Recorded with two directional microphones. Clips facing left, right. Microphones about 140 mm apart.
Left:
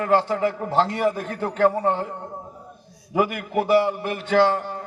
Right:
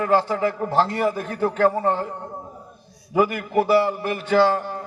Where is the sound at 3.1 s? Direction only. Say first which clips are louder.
Right 2 dB; 20° left (ahead or behind).